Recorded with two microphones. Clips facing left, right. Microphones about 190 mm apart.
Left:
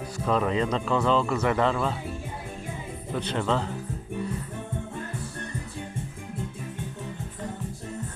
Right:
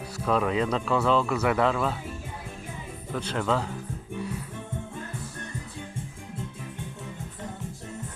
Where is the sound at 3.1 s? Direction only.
Centre (ahead or behind).